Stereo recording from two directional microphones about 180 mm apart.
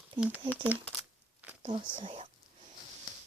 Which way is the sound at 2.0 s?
30° right (ahead or behind).